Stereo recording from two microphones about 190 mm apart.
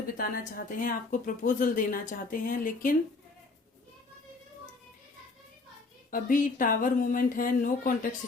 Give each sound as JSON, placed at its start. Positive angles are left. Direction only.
{"t": 0.2, "sound": "a woman's voice", "side_deg": 45}
{"t": 6.1, "sound": "a woman's voice", "side_deg": 45}